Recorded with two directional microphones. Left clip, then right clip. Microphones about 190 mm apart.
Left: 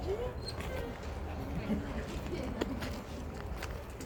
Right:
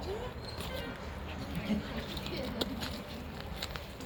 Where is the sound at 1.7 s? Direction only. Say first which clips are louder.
Right 1 dB; 35° right (ahead or behind).